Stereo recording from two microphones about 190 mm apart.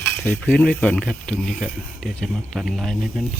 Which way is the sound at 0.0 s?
10° left (ahead or behind).